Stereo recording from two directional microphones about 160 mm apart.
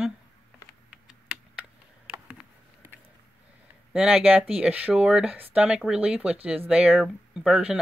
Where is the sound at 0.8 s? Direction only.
5° right (ahead or behind).